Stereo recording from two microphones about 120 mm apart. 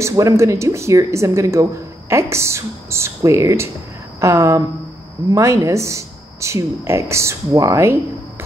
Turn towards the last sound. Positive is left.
turn(degrees=-25)  # may be behind; listen again after turning